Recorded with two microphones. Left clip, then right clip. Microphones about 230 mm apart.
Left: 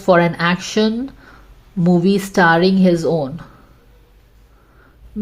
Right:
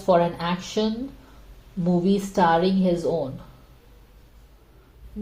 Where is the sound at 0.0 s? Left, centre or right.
Left.